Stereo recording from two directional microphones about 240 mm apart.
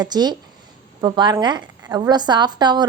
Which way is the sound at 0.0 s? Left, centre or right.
Centre.